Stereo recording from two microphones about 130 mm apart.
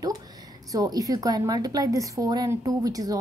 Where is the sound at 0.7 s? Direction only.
30° right (ahead or behind).